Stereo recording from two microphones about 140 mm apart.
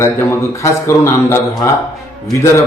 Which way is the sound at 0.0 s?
20° left (ahead or behind).